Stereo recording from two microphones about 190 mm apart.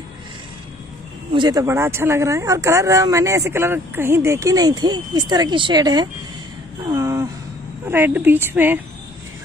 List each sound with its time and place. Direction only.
1.3 s speech: 20° right (ahead or behind)